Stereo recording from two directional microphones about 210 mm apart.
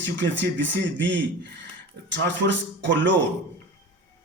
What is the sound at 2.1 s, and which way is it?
Speech, 60° right (ahead or behind).